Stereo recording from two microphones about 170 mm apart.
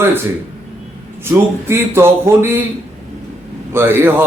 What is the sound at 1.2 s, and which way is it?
A man's voice, 15° right (ahead or behind).